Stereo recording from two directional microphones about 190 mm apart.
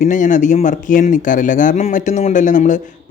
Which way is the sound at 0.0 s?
40° left (ahead or behind).